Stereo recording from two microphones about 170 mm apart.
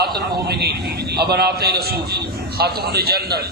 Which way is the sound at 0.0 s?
65° right (ahead or behind).